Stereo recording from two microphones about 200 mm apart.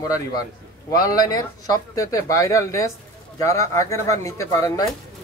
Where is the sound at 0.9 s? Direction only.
20° left (ahead or behind).